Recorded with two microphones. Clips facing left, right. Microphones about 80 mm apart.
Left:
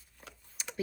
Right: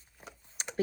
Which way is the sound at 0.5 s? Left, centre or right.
Right.